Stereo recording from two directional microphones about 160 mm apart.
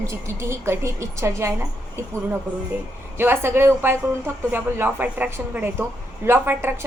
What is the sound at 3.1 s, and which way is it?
A woman's voice, 15° right (ahead or behind).